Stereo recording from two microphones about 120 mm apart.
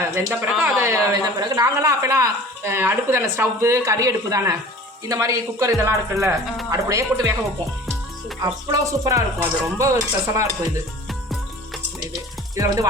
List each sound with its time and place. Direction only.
0.0 s a sound: 25° right (ahead or behind)
0.4 s speech: 10° right (ahead or behind)
0.8 s speech: 25° right (ahead or behind)
8.4 s speech: 30° right (ahead or behind)
12.5 s speech: 30° right (ahead or behind)